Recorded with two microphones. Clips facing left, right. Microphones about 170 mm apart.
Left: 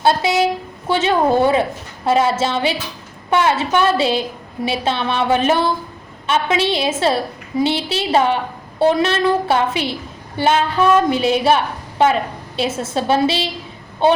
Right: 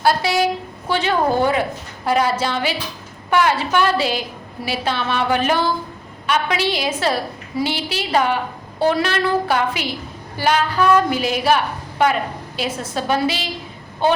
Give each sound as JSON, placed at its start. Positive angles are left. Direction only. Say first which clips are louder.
{"t": 0.0, "sound": "a woman's voice", "louder": "left 2 dB", "side_deg": 20}